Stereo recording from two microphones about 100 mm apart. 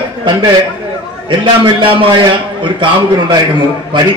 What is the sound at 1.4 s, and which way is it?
A man's voice, 55° right (ahead or behind).